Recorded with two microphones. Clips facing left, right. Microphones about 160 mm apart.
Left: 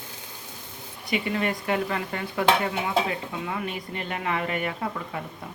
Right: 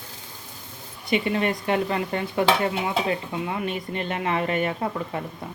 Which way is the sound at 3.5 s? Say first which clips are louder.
Right 3 dB; 25° right (ahead or behind).